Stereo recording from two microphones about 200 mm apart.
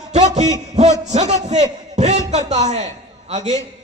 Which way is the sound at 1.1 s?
35° right (ahead or behind).